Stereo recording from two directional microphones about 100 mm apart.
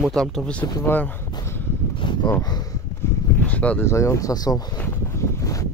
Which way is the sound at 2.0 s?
55° left (ahead or behind).